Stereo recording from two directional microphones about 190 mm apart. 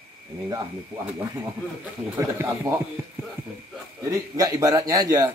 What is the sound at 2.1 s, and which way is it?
Speech, 15° right (ahead or behind).